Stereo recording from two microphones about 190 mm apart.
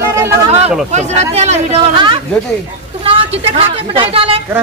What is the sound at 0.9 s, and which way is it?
A woman's voice, 35° right (ahead or behind).